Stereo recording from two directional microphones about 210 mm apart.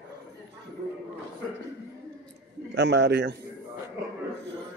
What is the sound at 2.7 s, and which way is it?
Speech, 55° right (ahead or behind).